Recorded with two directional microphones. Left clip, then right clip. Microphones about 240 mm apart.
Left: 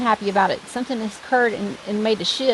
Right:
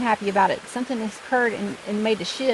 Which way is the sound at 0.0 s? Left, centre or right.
Left.